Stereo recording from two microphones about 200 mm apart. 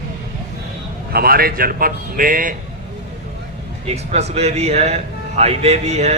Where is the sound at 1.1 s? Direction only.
50° right (ahead or behind).